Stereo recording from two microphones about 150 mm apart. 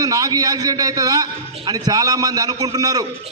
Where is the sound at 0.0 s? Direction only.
25° right (ahead or behind).